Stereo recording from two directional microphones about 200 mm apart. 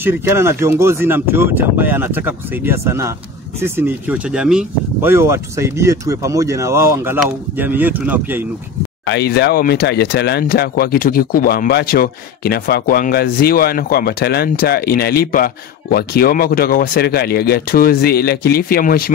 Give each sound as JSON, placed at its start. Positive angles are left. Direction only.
{"t": 0.0, "sound": "speech", "side_deg": -10}
{"t": 9.0, "sound": "speech", "side_deg": 55}